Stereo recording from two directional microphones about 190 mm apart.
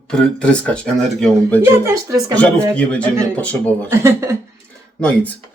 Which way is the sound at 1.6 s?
15° right (ahead or behind).